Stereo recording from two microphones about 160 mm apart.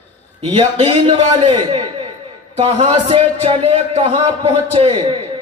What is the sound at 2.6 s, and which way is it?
A man's voice, 40° right (ahead or behind).